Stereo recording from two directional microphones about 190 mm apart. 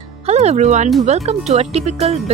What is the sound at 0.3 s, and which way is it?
Speech, 35° right (ahead or behind).